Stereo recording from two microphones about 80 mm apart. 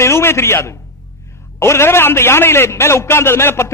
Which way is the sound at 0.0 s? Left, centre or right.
Left.